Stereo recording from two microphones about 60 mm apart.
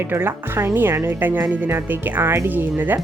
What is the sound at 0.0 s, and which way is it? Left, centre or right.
Speech, right.